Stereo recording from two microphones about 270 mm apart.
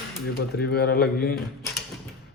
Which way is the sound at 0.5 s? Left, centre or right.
Left.